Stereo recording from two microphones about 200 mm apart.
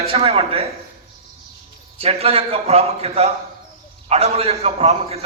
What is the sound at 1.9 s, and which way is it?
A man's voice, 30° right (ahead or behind).